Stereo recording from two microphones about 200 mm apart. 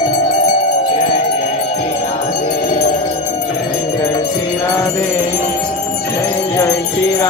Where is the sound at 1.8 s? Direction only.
35° left (ahead or behind).